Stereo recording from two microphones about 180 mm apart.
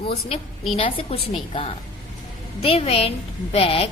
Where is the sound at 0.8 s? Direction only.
30° left (ahead or behind).